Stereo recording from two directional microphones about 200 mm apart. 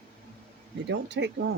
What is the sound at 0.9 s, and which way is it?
Speech, 60° right (ahead or behind).